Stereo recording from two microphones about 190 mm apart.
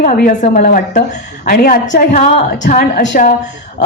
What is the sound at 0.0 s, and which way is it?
Speech, 45° left (ahead or behind).